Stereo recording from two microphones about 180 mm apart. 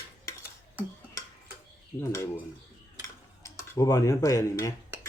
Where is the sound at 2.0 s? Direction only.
15° left (ahead or behind).